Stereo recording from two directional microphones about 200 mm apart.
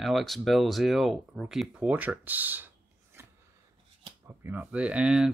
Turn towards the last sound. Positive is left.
turn(degrees=-5)  # may be behind; listen again after turning